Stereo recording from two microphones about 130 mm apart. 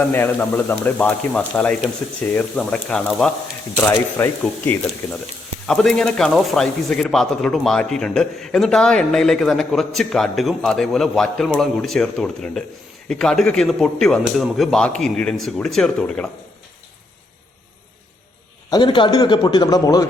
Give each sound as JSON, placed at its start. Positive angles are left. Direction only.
{"t": 0.0, "sound": "speech", "side_deg": 15}
{"t": 3.8, "sound": "speech", "side_deg": 20}
{"t": 5.6, "sound": "speech", "side_deg": 5}
{"t": 18.7, "sound": "a man's voice", "side_deg": 40}